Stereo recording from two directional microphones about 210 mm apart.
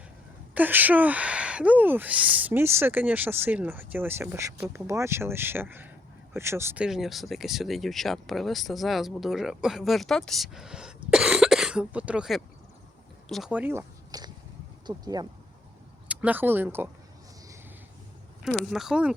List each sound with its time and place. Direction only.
0.5 s speech: 10° right (ahead or behind)
16.0 s speech: 5° right (ahead or behind)
18.7 s speech: centre (ahead or behind)